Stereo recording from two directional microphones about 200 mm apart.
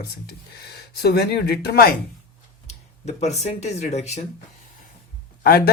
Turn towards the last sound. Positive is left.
turn(degrees=50)  # may be behind; listen again after turning